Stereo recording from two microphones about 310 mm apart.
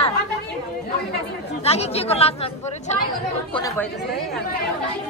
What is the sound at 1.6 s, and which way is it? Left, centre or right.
Speech, centre.